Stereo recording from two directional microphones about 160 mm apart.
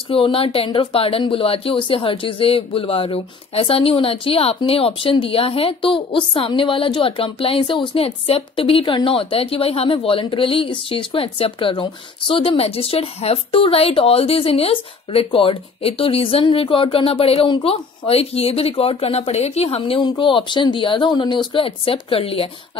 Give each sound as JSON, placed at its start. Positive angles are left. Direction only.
{"t": 0.1, "sound": "speech", "side_deg": 35}